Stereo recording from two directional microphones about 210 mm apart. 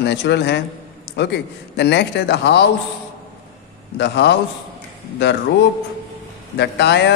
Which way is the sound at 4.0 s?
55° left (ahead or behind).